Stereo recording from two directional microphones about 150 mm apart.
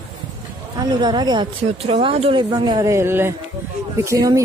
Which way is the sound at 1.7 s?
40° right (ahead or behind).